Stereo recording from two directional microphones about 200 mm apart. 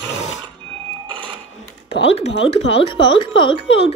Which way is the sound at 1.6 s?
30° left (ahead or behind).